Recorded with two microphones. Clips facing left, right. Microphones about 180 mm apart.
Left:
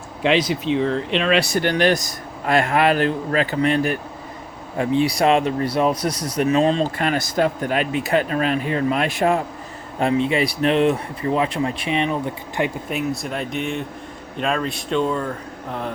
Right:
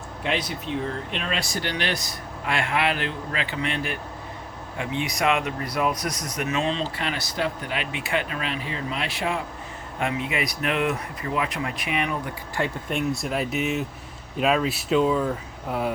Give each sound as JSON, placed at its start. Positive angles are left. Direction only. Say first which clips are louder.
{"t": 0.2, "sound": "speech", "louder": "left 9 dB", "side_deg": 90}
{"t": 10.0, "sound": "speech", "louder": "left 8 dB", "side_deg": 30}
{"t": 12.9, "sound": "speech", "louder": "left 1 dB", "side_deg": 0}